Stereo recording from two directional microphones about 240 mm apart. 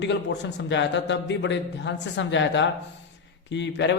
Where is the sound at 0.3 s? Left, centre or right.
Left.